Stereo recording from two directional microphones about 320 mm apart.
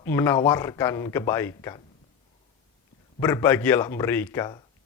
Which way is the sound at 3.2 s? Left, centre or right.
Centre.